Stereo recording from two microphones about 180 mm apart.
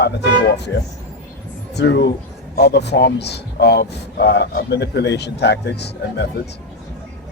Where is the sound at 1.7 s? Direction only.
75° left (ahead or behind).